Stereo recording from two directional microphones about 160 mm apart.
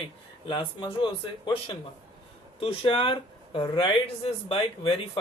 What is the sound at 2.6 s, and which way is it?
Speech, 35° left (ahead or behind).